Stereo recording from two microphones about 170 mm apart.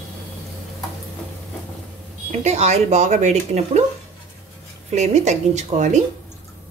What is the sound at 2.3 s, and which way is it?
A woman's voice, 40° right (ahead or behind).